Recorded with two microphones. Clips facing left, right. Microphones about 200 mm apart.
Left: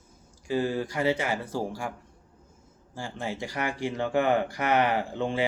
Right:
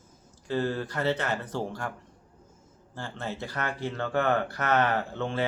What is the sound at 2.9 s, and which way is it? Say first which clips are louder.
Speech: left 2 dB; 10° left (ahead or behind).